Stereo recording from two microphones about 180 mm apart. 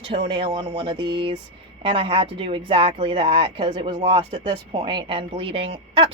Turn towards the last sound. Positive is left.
turn(degrees=-30)  # may be behind; listen again after turning